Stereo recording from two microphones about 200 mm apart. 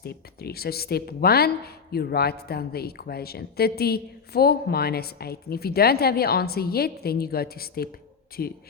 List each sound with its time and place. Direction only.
0.0 s speech: 50° left (ahead or behind)